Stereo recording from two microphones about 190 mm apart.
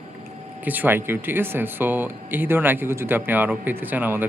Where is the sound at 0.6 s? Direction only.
10° right (ahead or behind).